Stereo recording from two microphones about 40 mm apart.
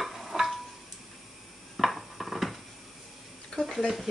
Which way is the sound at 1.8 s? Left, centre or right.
Centre.